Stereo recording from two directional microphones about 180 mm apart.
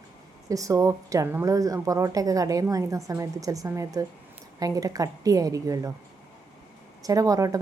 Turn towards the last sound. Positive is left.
turn(degrees=-20)  # may be behind; listen again after turning